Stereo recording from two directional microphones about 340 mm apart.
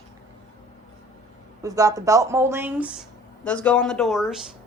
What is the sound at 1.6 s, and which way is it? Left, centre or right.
Speech, centre.